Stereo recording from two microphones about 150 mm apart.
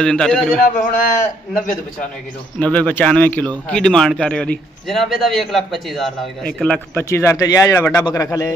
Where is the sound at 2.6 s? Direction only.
10° left (ahead or behind).